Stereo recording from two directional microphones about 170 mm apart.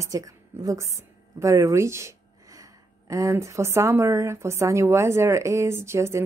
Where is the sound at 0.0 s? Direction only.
20° right (ahead or behind).